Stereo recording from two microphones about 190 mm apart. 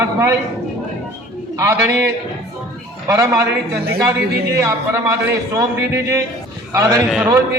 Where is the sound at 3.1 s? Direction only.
15° right (ahead or behind).